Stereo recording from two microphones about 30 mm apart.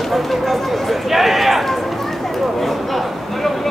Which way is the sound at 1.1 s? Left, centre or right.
Centre.